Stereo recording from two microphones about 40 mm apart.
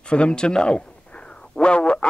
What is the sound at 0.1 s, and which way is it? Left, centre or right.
Speech, left.